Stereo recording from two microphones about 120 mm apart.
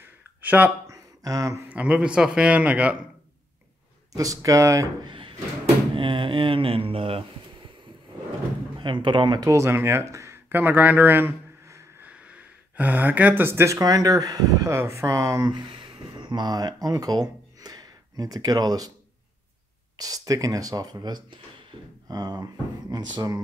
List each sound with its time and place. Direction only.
0.0 s a sound: 15° right (ahead or behind)
0.8 s a sound: 30° right (ahead or behind)
1.7 s speech: 10° right (ahead or behind)
4.1 s speech: 30° right (ahead or behind)
5.0 s drawer open or close: 45° right (ahead or behind)
5.9 s speech: 45° right (ahead or behind)
8.7 s a man's voice: 40° right (ahead or behind)
9.4 s speech: 25° right (ahead or behind)
15.5 s speech: 45° right (ahead or behind)
20.0 s speech: 30° right (ahead or behind)